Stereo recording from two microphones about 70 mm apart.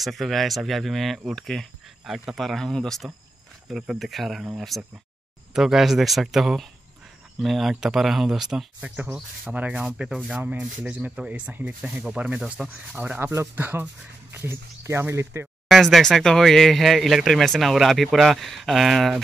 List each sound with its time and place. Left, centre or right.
0.0 s speech: centre
2.0 s speech: centre
3.6 s speech: centre
8.8 s speech: right
9.1 s speech: centre
12.4 s speech: centre
12.6 s speech: right
13.2 s speech: right
15.7 s speech: centre